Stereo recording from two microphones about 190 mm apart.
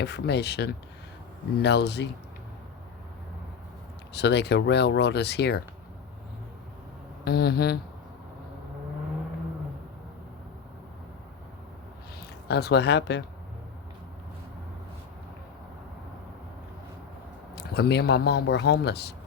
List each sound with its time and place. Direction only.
0.0 s speech: 65° left (ahead or behind)
4.1 s speech: 60° left (ahead or behind)
7.3 s speech: 55° left (ahead or behind)
12.5 s speech: 60° left (ahead or behind)
17.5 s speech: 60° left (ahead or behind)